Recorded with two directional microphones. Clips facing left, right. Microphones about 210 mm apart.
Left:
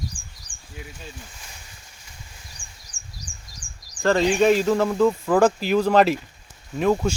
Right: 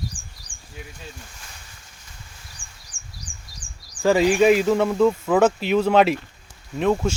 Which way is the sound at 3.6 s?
10° left (ahead or behind).